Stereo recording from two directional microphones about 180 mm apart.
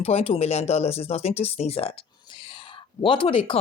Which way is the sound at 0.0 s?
35° left (ahead or behind).